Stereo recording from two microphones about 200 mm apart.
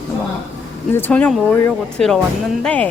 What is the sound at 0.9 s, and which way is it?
Speech, 10° left (ahead or behind).